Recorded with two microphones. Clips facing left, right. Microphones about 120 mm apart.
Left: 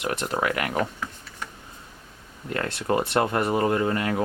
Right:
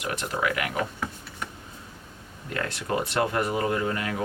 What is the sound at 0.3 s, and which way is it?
Speech, 40° left (ahead or behind).